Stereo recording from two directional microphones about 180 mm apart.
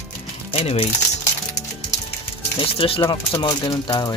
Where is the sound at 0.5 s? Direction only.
35° left (ahead or behind).